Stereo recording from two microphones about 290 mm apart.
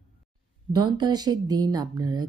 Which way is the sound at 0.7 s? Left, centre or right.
Centre.